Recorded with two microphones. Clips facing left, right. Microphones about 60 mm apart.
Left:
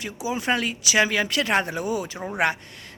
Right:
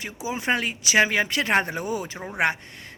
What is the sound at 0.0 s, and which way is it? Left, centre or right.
Speech, right.